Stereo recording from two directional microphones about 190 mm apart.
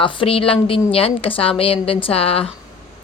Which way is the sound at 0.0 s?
30° left (ahead or behind).